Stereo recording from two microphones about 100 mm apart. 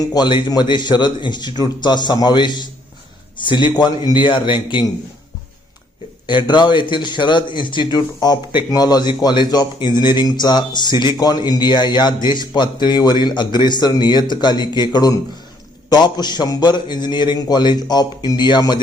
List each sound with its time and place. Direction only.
0.0 s speech: 40° left (ahead or behind)
6.2 s speech: 50° left (ahead or behind)
7.9 s speech: 40° left (ahead or behind)